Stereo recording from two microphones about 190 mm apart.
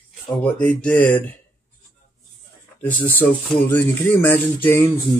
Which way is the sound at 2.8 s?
10° left (ahead or behind).